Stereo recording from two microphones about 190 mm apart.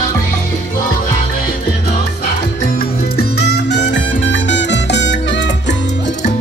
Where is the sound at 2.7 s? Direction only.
55° left (ahead or behind).